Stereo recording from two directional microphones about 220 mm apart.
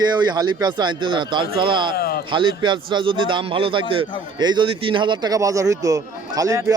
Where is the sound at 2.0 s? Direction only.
45° left (ahead or behind).